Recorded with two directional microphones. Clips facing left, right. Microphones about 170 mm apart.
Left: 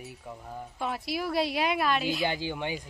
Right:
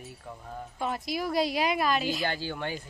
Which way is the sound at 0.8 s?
Centre (ahead or behind).